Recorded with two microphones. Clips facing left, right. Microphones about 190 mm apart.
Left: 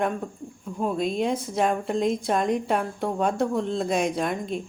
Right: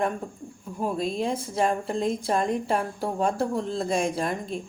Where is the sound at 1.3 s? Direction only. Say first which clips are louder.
Left 2 dB; 30° right (ahead or behind).